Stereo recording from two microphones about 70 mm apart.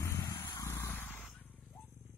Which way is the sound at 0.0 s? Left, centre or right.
Left.